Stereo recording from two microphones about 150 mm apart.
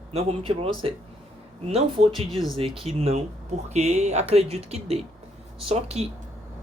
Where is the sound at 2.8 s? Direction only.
45° right (ahead or behind).